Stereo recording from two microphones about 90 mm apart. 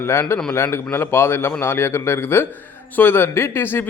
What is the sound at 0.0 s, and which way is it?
A man's voice, 30° left (ahead or behind).